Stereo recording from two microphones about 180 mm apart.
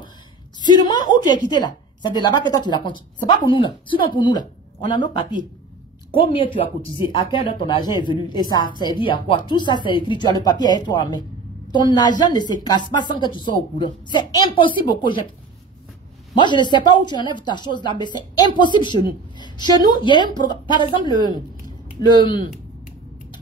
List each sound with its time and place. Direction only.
0.6 s a woman's voice: 25° left (ahead or behind)
16.3 s a woman's voice: 25° left (ahead or behind)